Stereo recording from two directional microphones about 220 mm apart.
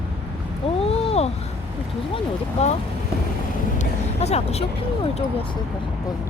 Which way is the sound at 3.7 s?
30° left (ahead or behind).